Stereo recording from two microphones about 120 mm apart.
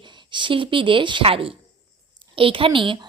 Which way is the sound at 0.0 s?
40° right (ahead or behind).